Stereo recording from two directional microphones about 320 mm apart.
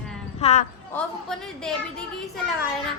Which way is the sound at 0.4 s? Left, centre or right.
Centre.